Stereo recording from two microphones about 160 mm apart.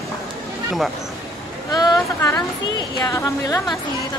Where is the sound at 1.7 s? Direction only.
20° left (ahead or behind).